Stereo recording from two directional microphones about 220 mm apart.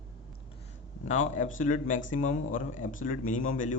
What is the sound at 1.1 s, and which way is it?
Speech, 35° left (ahead or behind).